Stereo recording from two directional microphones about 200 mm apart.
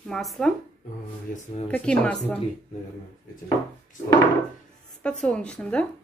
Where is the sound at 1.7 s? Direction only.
5° left (ahead or behind).